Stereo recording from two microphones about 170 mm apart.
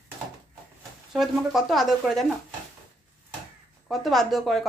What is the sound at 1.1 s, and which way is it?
A woman's voice, centre (ahead or behind).